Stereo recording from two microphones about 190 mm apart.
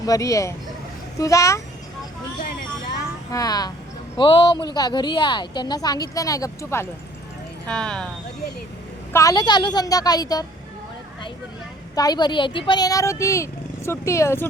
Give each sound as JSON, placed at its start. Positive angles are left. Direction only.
{"t": 0.0, "sound": "speech", "side_deg": 15}
{"t": 3.3, "sound": "speech", "side_deg": 20}
{"t": 9.1, "sound": "speech", "side_deg": 20}
{"t": 11.9, "sound": "speech", "side_deg": 20}